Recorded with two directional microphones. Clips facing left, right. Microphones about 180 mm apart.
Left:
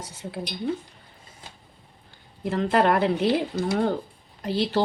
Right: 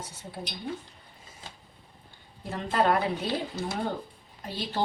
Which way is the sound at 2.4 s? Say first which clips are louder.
Left 5 dB; 80° left.